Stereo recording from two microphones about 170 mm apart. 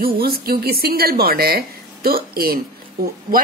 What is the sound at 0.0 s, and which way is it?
Speech, 60° right (ahead or behind).